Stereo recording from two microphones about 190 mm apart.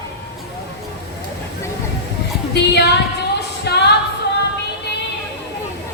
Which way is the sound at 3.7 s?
60° left (ahead or behind).